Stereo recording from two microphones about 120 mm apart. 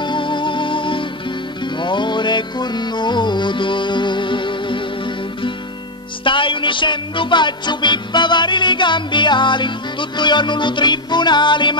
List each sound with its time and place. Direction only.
0.0 s music: 40° left (ahead or behind)